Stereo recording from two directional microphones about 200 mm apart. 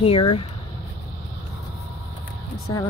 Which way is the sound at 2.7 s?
20° left (ahead or behind).